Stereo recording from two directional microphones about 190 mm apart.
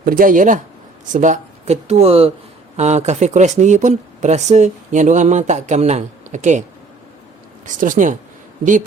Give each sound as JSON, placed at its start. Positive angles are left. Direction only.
{"t": 0.0, "sound": "speech", "side_deg": -50}
{"t": 7.6, "sound": "speech", "side_deg": -45}